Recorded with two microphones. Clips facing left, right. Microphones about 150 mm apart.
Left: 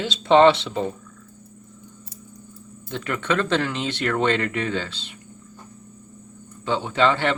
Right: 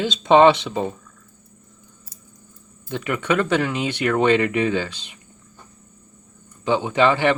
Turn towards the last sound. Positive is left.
turn(degrees=-10)  # may be behind; listen again after turning